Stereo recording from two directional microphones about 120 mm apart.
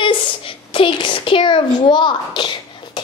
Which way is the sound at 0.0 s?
45° left (ahead or behind).